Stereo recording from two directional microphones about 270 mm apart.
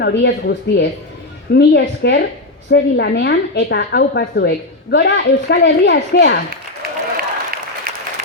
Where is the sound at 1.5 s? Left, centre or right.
Left.